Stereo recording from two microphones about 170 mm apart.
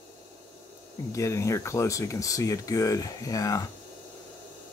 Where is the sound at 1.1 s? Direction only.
15° left (ahead or behind).